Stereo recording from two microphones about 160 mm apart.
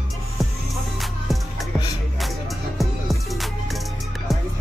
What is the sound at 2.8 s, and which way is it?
Music, centre (ahead or behind).